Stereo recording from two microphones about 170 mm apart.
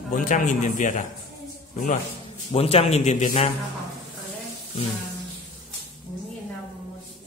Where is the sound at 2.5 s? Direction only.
35° left (ahead or behind).